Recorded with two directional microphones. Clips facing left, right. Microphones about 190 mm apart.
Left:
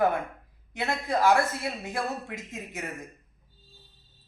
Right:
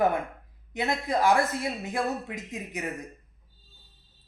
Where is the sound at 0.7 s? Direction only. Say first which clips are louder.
Right 1 dB; 15° right (ahead or behind).